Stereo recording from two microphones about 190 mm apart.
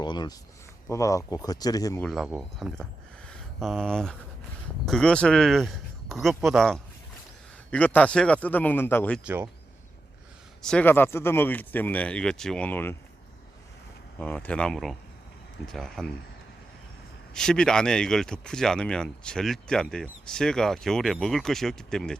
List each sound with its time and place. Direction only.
0.0 s a sound: 20° left (ahead or behind)
0.9 s speech: 15° left (ahead or behind)
2.0 s speech: centre (ahead or behind)
9.2 s speech: 10° right (ahead or behind)
10.6 s speech: 5° left (ahead or behind)
14.2 s speech: 10° left (ahead or behind)
17.3 s speech: 5° left (ahead or behind)